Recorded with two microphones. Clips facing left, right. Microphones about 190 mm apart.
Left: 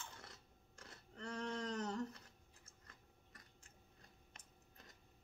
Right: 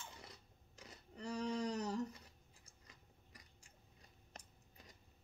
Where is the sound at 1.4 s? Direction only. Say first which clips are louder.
Right 3 dB; centre (ahead or behind).